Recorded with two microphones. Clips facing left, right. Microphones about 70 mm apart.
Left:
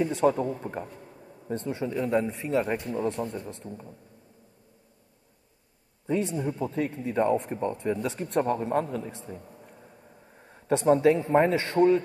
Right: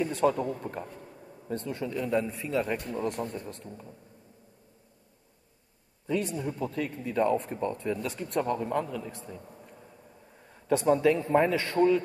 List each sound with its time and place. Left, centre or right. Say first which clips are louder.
0.0 s speech: left 2 dB; left
1.1 s a sound: even; centre
1.5 s speech: left 3 dB; left
6.0 s speech: left 3 dB; left
9.8 s vehicle: left 1 dB; centre
10.4 s speech: left 1 dB; left